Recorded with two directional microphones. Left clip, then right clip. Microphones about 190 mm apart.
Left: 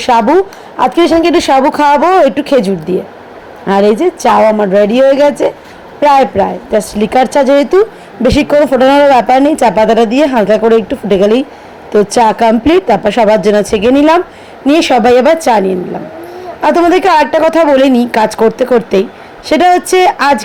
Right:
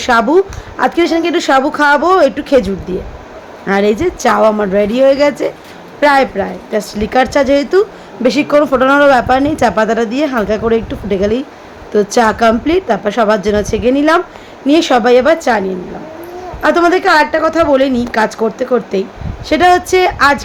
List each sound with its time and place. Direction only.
0.0 s a woman's voice: 10° left (ahead or behind); by 20.4 s 25° left (ahead or behind)